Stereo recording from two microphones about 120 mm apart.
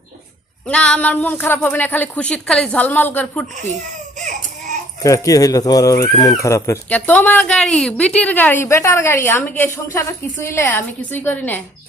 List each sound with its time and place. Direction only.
0.7 s a woman's voice: 10° left (ahead or behind)
5.0 s speech: 30° left (ahead or behind)
6.9 s a woman's voice: 15° left (ahead or behind)